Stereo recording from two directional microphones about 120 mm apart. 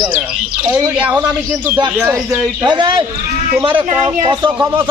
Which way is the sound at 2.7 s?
40° right (ahead or behind).